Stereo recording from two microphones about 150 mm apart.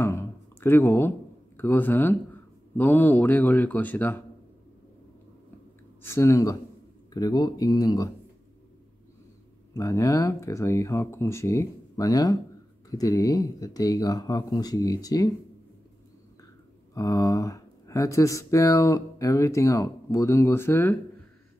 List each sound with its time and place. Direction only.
0.0 s a sound: 15° left (ahead or behind)
1.6 s speech: 15° left (ahead or behind)
6.0 s speech: 15° left (ahead or behind)
9.8 s speech: 20° left (ahead or behind)
16.9 s speech: 25° left (ahead or behind)